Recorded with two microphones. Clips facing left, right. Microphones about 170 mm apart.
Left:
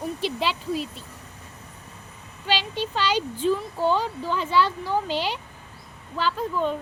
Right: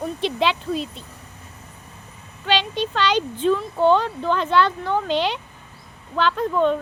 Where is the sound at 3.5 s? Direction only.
65° right (ahead or behind).